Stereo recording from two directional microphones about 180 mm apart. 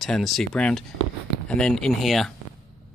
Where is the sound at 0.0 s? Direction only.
Centre (ahead or behind).